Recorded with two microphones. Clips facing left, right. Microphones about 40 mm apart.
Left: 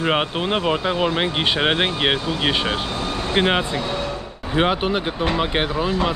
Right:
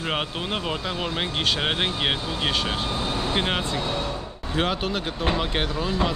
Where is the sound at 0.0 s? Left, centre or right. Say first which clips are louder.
Left 7 dB; left.